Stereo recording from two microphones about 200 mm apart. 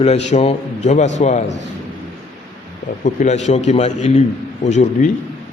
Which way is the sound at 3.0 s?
35° left (ahead or behind).